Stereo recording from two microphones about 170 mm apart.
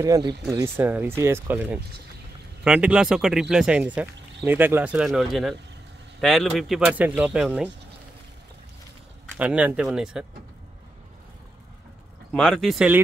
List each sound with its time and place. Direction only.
0.0 s speech: 20° right (ahead or behind); by 7.7 s 5° right (ahead or behind)
9.4 s speech: 10° right (ahead or behind)
12.3 s speech: centre (ahead or behind)